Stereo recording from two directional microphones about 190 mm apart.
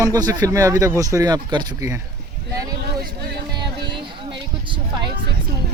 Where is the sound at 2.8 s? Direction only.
55° right (ahead or behind).